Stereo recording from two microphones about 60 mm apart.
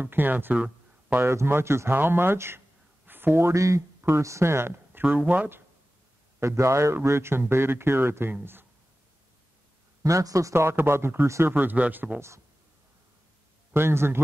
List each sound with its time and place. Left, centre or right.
0.0 s speech: right
1.2 s speech: right
3.1 s a sound: right
3.5 s speech: right
6.4 s speech: right
10.0 s speech: right
10.6 s speech: right
11.2 s speech: right
11.5 s speech: right
13.7 s speech: right